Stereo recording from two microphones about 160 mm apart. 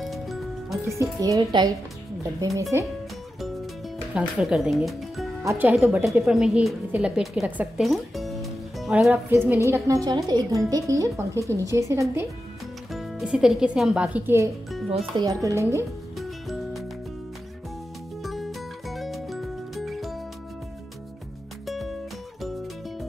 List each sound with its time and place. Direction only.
0.0 s music: centre (ahead or behind)
1.2 s speech: 25° right (ahead or behind)
2.7 s speech: 15° right (ahead or behind)
4.1 s speech: 5° right (ahead or behind)
5.4 s speech: 15° right (ahead or behind)
12.9 s speech: 5° right (ahead or behind)
14.9 s speech: 35° right (ahead or behind)
15.2 s speech: 20° right (ahead or behind)
16.2 s music: centre (ahead or behind)
18.2 s music: centre (ahead or behind)
21.6 s music: centre (ahead or behind)